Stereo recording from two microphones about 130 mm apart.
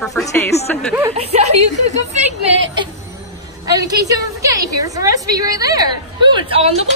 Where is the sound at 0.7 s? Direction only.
10° left (ahead or behind).